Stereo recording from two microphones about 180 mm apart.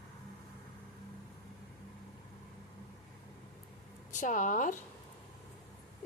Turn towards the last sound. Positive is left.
turn(degrees=45)  # may be behind; listen again after turning